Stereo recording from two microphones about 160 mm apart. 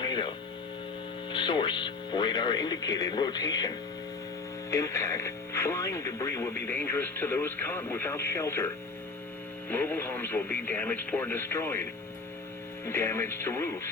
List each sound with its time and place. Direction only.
0.0 s music: 30° left (ahead or behind)
1.3 s speech: 30° left (ahead or behind); by 13.9 s 15° left (ahead or behind)